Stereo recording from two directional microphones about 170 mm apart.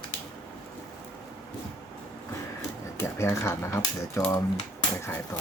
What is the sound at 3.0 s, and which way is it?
Speech, 15° left (ahead or behind).